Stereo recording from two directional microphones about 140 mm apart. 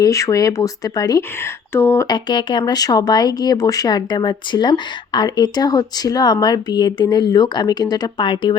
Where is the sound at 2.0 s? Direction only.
30° left (ahead or behind).